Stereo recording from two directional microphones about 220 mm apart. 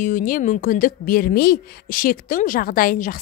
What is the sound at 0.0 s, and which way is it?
A woman's voice, 40° left (ahead or behind).